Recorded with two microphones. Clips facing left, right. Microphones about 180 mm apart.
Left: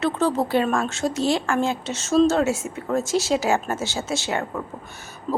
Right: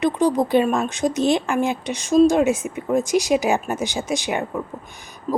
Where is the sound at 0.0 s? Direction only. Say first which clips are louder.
Right 3 dB; 15° right (ahead or behind).